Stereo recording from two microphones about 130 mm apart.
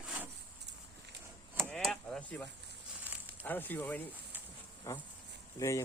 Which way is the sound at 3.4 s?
15° left (ahead or behind).